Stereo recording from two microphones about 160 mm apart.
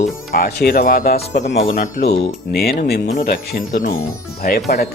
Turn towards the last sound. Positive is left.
turn(degrees=70)  # may be behind; listen again after turning